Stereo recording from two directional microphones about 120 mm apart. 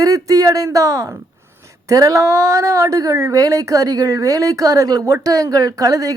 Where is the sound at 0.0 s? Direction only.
30° right (ahead or behind).